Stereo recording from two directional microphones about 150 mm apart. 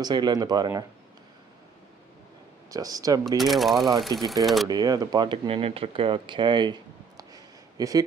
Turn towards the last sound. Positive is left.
turn(degrees=-25)  # may be behind; listen again after turning